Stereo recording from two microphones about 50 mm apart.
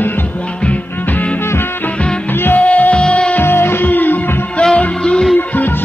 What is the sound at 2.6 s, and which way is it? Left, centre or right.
Music, left.